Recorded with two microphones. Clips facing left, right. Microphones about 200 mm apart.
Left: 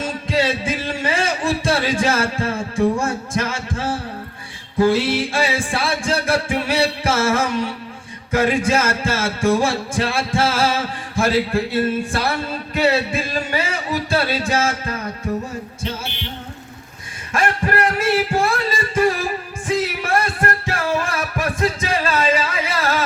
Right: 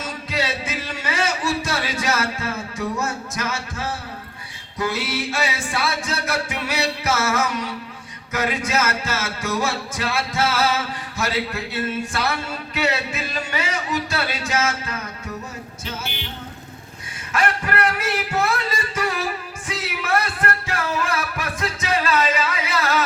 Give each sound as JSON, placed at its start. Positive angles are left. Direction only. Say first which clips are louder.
{"t": 0.0, "sound": "music", "louder": "left 6 dB", "side_deg": 30}
{"t": 0.9, "sound": "a sound", "louder": "even", "side_deg": 30}
{"t": 2.0, "sound": "music", "louder": "left 4 dB", "side_deg": 30}
{"t": 2.7, "sound": "a man's voice", "louder": "left 9 dB", "side_deg": 30}
{"t": 4.8, "sound": "music", "louder": "left 8 dB", "side_deg": 30}
{"t": 17.3, "sound": "singing", "louder": "left 3 dB", "side_deg": 30}
{"t": 20.0, "sound": "music", "louder": "left 3 dB", "side_deg": 30}
{"t": 21.4, "sound": "a sound", "louder": "left 6 dB", "side_deg": 30}